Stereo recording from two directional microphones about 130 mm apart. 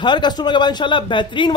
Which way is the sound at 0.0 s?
35° left (ahead or behind).